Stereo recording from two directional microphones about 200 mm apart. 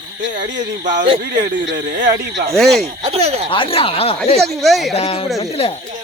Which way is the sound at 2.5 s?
Centre (ahead or behind).